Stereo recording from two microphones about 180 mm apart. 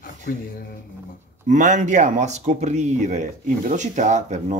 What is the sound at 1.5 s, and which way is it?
Speech, 45° right (ahead or behind).